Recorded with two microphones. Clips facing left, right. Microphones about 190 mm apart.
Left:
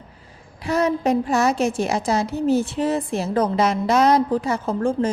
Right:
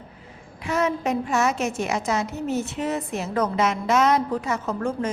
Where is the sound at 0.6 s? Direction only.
35° left (ahead or behind).